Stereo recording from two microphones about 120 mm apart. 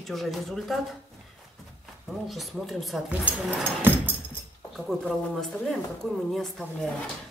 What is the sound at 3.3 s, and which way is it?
Speech, 15° right (ahead or behind).